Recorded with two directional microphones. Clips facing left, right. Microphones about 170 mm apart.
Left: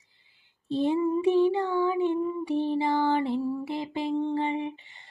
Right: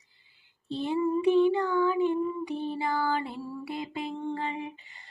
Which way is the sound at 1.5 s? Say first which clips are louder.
Even; 25° left (ahead or behind).